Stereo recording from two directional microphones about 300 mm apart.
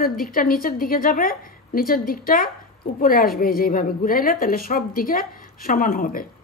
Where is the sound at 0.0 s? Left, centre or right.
Left.